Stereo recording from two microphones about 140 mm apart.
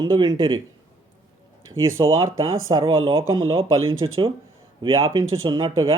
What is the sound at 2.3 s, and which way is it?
Speech, 30° right (ahead or behind).